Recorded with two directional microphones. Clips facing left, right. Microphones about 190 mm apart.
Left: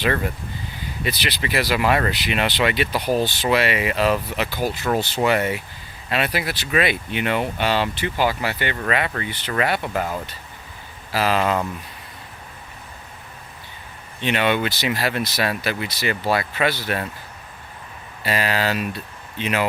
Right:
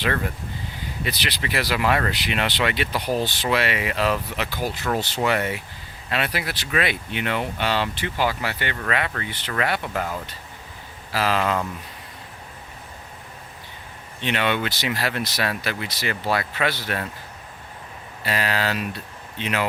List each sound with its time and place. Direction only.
1.0 s speech: 10° left (ahead or behind)
14.2 s speech: 10° left (ahead or behind)
18.3 s speech: 10° left (ahead or behind)